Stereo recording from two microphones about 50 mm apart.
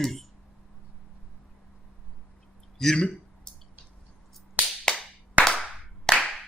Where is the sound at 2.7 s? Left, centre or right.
Centre.